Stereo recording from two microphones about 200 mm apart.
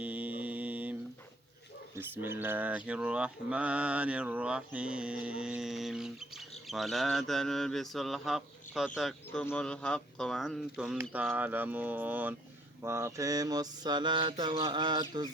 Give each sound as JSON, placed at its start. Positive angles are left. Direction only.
{"t": 0.0, "sound": "mantra", "side_deg": -5}
{"t": 2.0, "sound": "mantra", "side_deg": -10}